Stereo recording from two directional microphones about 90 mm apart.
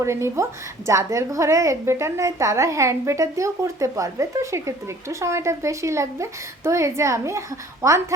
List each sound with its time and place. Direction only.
0.0 s a woman's voice: 30° right (ahead or behind)